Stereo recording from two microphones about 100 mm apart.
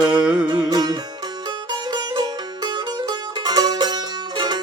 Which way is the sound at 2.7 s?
40° right (ahead or behind).